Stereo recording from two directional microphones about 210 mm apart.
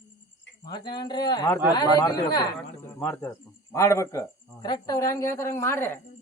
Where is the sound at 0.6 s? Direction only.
20° left (ahead or behind).